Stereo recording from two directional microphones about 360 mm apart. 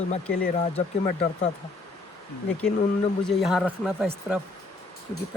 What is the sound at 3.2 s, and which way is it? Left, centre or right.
Speech, centre.